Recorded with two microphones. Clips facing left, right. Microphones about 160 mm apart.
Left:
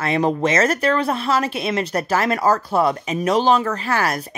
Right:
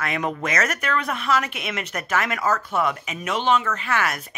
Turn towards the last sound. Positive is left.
turn(degrees=35)  # may be behind; listen again after turning